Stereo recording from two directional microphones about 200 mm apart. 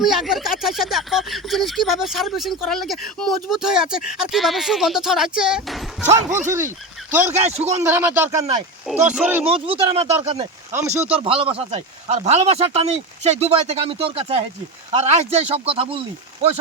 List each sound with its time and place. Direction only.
0.0 s speech: centre (ahead or behind)
6.1 s speech: 40° right (ahead or behind)
6.5 s speech: 10° right (ahead or behind)
7.3 s speech: 35° right (ahead or behind)
7.8 s speech: 10° right (ahead or behind)
9.5 s speech: 25° right (ahead or behind)